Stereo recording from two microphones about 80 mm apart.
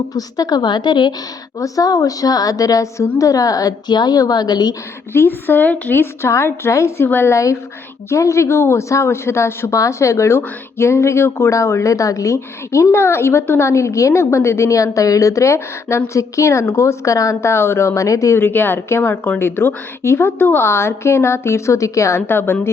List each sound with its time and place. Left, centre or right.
0.1 s a woman's voice: left
1.5 s a woman's voice: left
5.1 s a woman's voice: left
7.3 s speech: left
18.3 s speech: left
22.3 s a woman's voice: left